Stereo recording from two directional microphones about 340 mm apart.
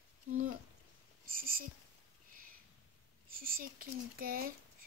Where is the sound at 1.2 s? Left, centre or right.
Right.